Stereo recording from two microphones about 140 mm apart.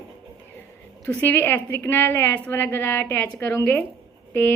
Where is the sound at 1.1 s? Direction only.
15° left (ahead or behind).